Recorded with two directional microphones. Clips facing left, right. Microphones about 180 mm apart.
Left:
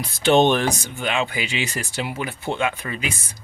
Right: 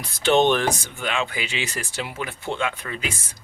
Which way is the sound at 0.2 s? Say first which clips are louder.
Left 2 dB; 15° left (ahead or behind).